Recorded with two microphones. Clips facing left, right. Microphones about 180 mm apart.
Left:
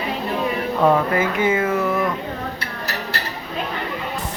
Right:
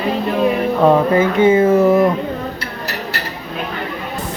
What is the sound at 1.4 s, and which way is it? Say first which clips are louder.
Speech: right 9 dB; 35° right (ahead or behind).